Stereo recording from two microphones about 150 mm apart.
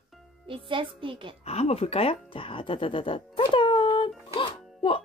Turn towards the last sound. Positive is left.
turn(degrees=35)  # may be behind; listen again after turning